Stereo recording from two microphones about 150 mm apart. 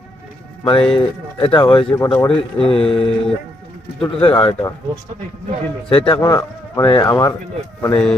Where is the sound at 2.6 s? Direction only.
40° left (ahead or behind).